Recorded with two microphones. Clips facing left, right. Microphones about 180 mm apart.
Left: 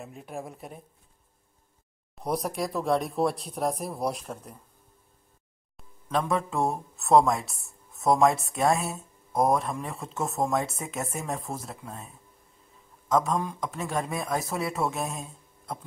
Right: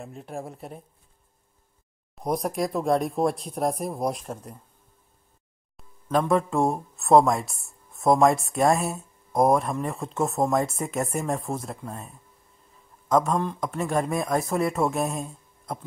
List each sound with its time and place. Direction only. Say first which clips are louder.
0.3 s speech: right 2 dB; 35° right (ahead or behind)
2.3 s speech: right 3 dB; centre (ahead or behind)
5.8 s speech: right 4 dB; centre (ahead or behind)
13.1 s speech: right 3 dB; centre (ahead or behind)